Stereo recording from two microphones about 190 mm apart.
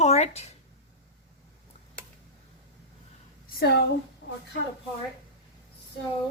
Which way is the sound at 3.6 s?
60° left (ahead or behind).